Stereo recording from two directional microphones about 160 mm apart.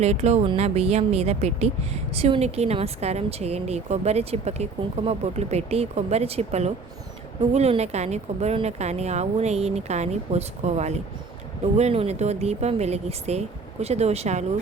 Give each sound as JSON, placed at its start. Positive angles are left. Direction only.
{"t": 0.0, "sound": "a woman's voice", "side_deg": -45}